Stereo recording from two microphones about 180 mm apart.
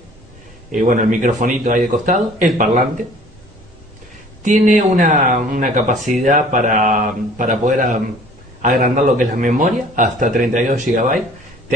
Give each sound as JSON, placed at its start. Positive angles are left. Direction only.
{"t": 0.7, "sound": "a man's voice", "side_deg": -45}
{"t": 4.4, "sound": "a man's voice", "side_deg": -45}